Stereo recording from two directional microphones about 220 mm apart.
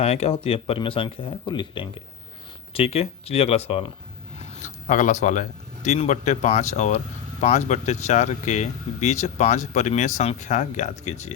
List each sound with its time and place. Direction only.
0.0 s speech: 30° left (ahead or behind)